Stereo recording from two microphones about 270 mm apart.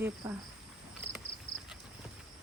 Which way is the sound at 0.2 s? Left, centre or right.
Centre.